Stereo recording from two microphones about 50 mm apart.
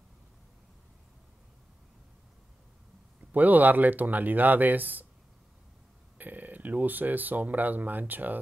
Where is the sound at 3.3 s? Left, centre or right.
Right.